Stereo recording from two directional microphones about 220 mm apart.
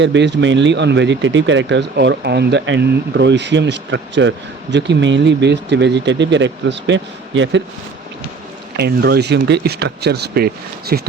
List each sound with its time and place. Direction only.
0.0 s speech: 55° right (ahead or behind)
8.7 s speech: 45° right (ahead or behind)